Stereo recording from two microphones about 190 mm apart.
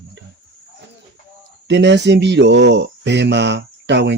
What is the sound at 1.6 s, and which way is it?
Speech, 65° right (ahead or behind).